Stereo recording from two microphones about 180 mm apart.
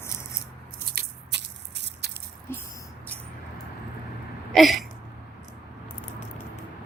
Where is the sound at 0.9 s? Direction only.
70° right (ahead or behind).